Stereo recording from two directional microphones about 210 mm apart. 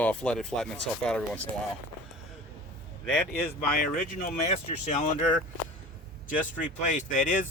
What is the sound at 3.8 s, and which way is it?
Speech, 40° left (ahead or behind).